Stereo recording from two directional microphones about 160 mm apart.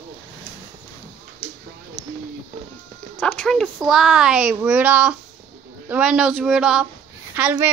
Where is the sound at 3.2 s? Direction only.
5° left (ahead or behind).